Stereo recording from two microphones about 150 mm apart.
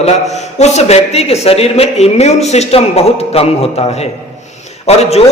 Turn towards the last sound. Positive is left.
turn(degrees=45)  # may be behind; listen again after turning